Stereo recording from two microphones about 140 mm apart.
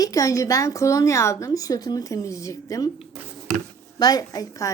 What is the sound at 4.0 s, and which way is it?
Speech, 25° left (ahead or behind).